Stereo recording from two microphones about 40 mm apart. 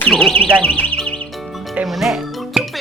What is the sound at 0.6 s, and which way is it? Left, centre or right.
Speech, left.